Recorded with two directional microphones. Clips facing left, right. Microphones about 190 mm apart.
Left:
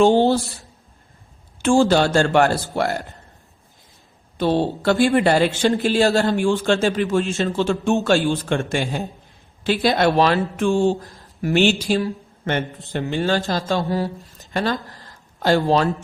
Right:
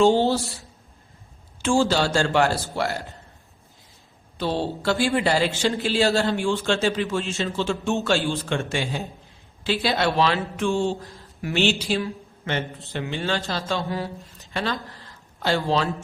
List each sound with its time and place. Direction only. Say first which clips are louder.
0.0 s speech: left 3 dB; 55° left (ahead or behind)
1.6 s a man's voice: left 5 dB; 55° left (ahead or behind)
4.4 s a man's voice: left 6 dB; 55° left (ahead or behind)
14.3 s a sound: left 5 dB; 45° left (ahead or behind)